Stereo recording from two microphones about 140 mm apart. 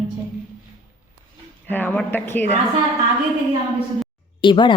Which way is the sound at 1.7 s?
15° left (ahead or behind).